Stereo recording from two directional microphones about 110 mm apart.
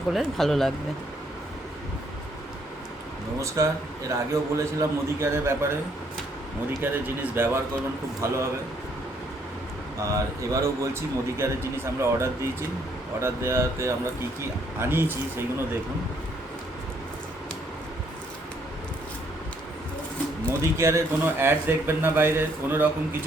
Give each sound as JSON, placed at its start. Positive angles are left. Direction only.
{"t": 0.1, "sound": "speech", "side_deg": 0}
{"t": 3.4, "sound": "speech", "side_deg": -25}
{"t": 6.8, "sound": "speech", "side_deg": -20}
{"t": 10.0, "sound": "speech", "side_deg": -30}
{"t": 20.6, "sound": "speech", "side_deg": -25}